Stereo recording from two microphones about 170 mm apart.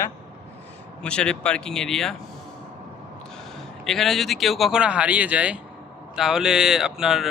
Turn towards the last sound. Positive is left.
turn(degrees=0)  # may be behind; listen again after turning